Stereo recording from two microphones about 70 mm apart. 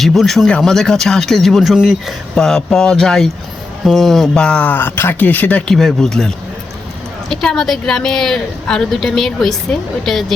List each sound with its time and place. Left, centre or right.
0.0 s a woman's voice: centre
2.3 s a woman's voice: centre
4.6 s speech: left
5.6 s a woman's voice: centre